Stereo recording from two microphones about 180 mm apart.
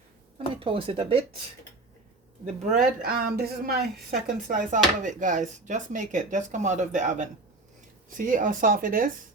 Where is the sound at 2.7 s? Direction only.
55° right (ahead or behind).